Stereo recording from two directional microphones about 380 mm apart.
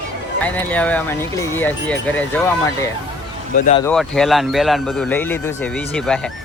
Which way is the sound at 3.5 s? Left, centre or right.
Centre.